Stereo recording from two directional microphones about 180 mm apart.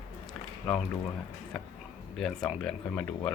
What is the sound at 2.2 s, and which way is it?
Speech, 5° left (ahead or behind).